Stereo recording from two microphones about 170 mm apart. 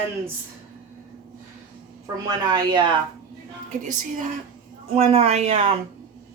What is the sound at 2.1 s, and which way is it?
Speech, 25° right (ahead or behind).